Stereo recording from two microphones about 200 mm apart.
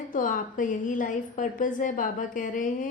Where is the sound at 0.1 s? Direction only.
40° left (ahead or behind).